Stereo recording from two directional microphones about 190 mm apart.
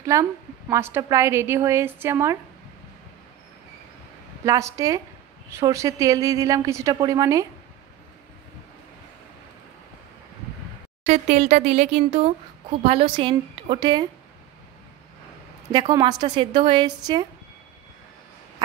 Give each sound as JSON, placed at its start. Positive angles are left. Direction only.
{"t": 0.0, "sound": "a woman's voice", "side_deg": -15}
{"t": 4.5, "sound": "a woman's voice", "side_deg": -15}
{"t": 11.1, "sound": "a woman's voice", "side_deg": -35}
{"t": 15.7, "sound": "a woman's voice", "side_deg": -20}